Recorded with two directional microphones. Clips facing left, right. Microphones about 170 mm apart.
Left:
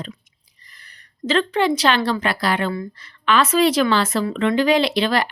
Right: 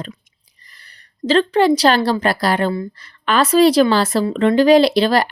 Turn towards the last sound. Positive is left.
turn(degrees=-35)  # may be behind; listen again after turning